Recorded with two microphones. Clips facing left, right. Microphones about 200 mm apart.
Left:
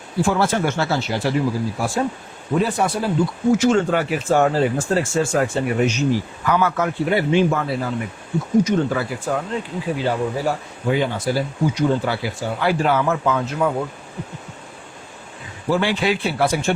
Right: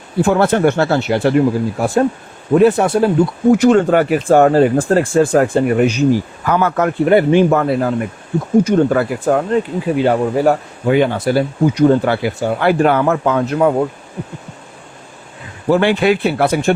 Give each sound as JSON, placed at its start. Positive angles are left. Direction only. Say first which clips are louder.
{"t": 0.2, "sound": "speech", "louder": "right 6 dB", "side_deg": -60}
{"t": 15.7, "sound": "speech", "louder": "right 7 dB", "side_deg": -60}